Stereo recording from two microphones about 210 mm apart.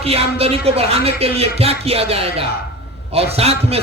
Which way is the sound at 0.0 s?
30° right (ahead or behind).